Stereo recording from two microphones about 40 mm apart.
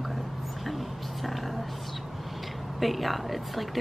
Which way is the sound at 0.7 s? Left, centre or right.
Centre.